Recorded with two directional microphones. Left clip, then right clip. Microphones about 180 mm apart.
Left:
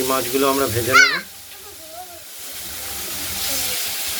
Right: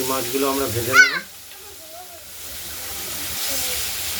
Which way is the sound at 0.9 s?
Centre (ahead or behind).